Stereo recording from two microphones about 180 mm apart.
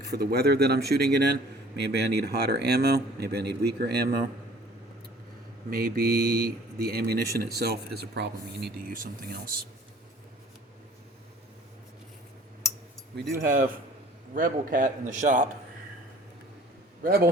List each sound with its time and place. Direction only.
0.1 s a man's voice: 60° right (ahead or behind)
5.7 s a man's voice: 55° right (ahead or behind)
8.9 s a man's voice: 55° right (ahead or behind)
14.3 s speech: 50° right (ahead or behind)
17.0 s a man's voice: 55° right (ahead or behind)